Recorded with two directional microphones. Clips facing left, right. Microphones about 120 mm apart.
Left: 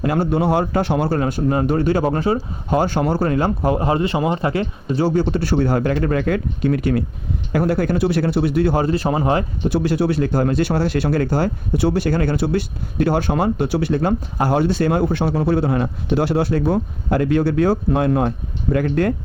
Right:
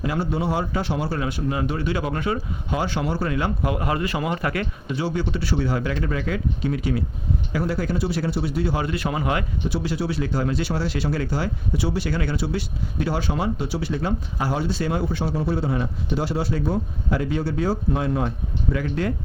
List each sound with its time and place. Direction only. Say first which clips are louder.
0.0 s speech: left 6 dB; 55° left (ahead or behind); by 4.9 s 25° left (ahead or behind)
4.9 s speech: left 8 dB; 40° left (ahead or behind); by 8.8 s 60° left (ahead or behind)
8.8 s speech: left 6 dB; 35° left (ahead or behind)
9.6 s speech: left 9 dB; 55° left (ahead or behind)